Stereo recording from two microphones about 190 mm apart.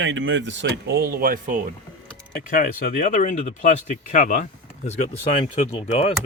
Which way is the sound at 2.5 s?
45° left (ahead or behind).